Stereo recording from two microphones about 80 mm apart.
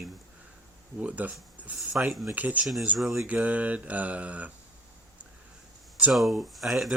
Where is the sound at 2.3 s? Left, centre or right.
Centre.